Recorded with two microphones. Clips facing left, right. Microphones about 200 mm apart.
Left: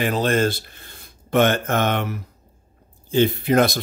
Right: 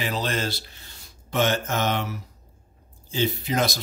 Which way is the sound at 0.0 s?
50° left (ahead or behind).